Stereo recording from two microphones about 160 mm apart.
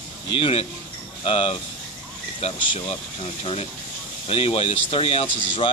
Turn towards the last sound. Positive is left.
turn(degrees=40)  # may be behind; listen again after turning